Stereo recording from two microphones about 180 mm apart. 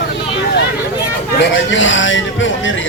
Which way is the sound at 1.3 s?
85° left.